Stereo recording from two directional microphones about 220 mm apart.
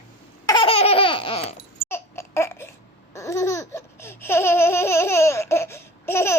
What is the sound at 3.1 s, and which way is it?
Laughter, 10° left (ahead or behind).